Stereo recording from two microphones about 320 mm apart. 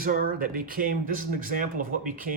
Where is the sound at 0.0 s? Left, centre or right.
Right.